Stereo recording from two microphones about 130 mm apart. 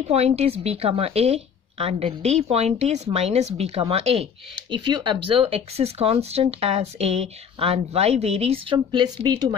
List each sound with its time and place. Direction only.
0.1 s speech: 55° right (ahead or behind); by 9.6 s 30° right (ahead or behind)